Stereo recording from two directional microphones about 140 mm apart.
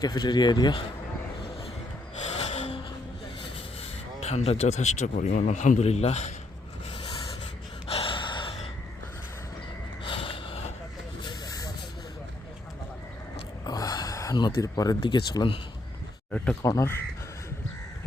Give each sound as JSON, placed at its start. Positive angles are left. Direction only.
{"t": 0.0, "sound": "speech", "side_deg": 30}
{"t": 2.2, "sound": "music", "side_deg": 50}
{"t": 4.2, "sound": "a man's voice", "side_deg": 50}
{"t": 6.9, "sound": "a sound", "side_deg": 40}
{"t": 7.9, "sound": "gasp", "side_deg": 40}
{"t": 10.0, "sound": "snort", "side_deg": 40}
{"t": 11.2, "sound": "vehicle", "side_deg": 30}
{"t": 13.7, "sound": "speech", "side_deg": 25}
{"t": 16.6, "sound": "speech", "side_deg": 20}